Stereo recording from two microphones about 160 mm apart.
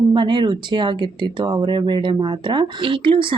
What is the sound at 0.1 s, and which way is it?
Speech, 30° right (ahead or behind).